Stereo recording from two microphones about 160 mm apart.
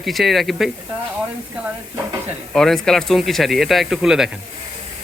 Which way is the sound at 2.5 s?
5° left (ahead or behind).